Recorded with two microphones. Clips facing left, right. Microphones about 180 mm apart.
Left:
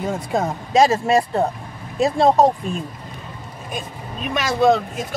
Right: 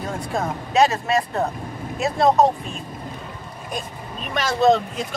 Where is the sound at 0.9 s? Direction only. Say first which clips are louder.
Left 4 dB; 30° left (ahead or behind).